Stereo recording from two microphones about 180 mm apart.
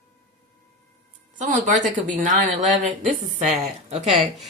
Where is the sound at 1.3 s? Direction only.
45° right (ahead or behind).